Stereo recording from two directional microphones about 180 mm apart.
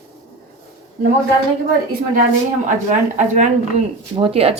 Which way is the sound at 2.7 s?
40° right (ahead or behind).